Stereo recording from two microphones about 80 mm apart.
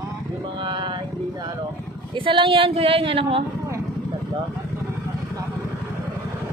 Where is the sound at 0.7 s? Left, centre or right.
Right.